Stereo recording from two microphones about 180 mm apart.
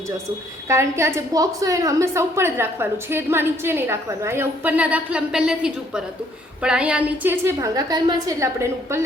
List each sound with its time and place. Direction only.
0.7 s a woman's voice: 15° right (ahead or behind)